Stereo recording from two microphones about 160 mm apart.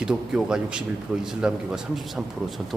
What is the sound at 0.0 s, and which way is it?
Speech, 5° right (ahead or behind).